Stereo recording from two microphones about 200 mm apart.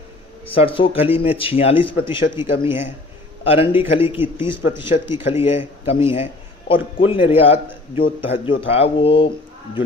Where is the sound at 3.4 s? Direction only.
30° left (ahead or behind).